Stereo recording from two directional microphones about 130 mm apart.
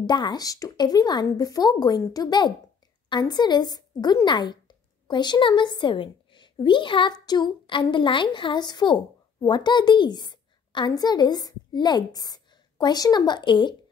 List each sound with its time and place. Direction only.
0.0 s a woman's voice: 35° left (ahead or behind)